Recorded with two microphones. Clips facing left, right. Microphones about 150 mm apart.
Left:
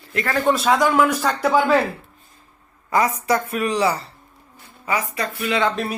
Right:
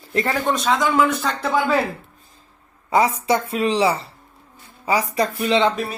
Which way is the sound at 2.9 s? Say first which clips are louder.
Right 1 dB; 25° right (ahead or behind).